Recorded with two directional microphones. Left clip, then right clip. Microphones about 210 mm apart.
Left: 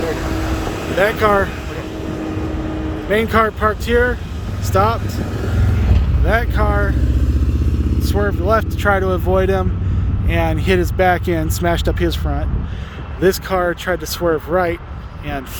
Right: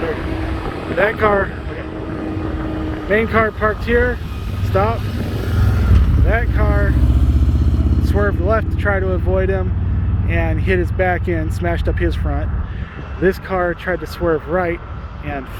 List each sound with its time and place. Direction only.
0.1 s vehicle: 50° left (ahead or behind)
1.0 s speech: 30° left (ahead or behind)
3.1 s speech: 20° left (ahead or behind)
5.5 s vehicle: 55° right (ahead or behind)
6.2 s speech: 25° left (ahead or behind)
8.1 s speech: 15° left (ahead or behind)